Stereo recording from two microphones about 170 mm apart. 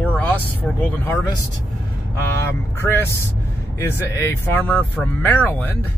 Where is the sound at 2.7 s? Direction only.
15° left (ahead or behind).